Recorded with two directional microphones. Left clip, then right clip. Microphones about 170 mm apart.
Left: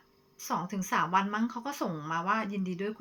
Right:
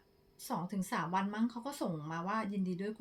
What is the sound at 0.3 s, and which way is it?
Speech, 35° right (ahead or behind).